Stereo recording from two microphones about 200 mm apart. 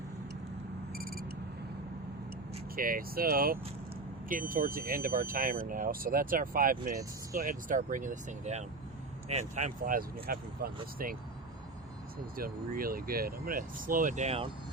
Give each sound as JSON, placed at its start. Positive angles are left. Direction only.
{"t": 0.9, "sound": "a sound", "side_deg": -45}
{"t": 2.7, "sound": "speech", "side_deg": -45}
{"t": 12.4, "sound": "speech", "side_deg": -45}